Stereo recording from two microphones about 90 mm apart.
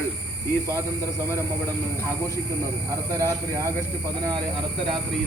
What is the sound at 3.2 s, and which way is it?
Speech, 35° right (ahead or behind).